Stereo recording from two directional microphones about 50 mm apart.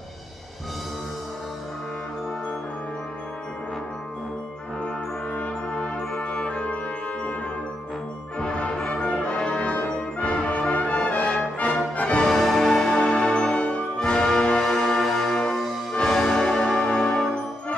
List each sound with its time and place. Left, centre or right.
5.3 s brass instrument: left
8.4 s music: left
12.3 s music: centre; by 13.8 s left
13.9 s music: centre